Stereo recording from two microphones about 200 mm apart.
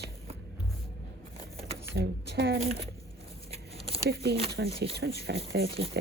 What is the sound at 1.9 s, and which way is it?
Speech, 55° right (ahead or behind).